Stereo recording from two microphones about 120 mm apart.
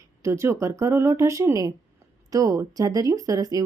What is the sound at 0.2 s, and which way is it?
A woman's voice, 25° right (ahead or behind).